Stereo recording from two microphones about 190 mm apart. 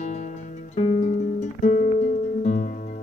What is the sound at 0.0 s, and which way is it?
Music, 40° left (ahead or behind).